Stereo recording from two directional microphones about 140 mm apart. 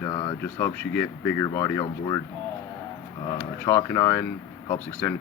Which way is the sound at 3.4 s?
15° left (ahead or behind).